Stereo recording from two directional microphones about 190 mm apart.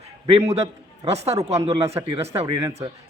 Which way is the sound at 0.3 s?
35° right (ahead or behind).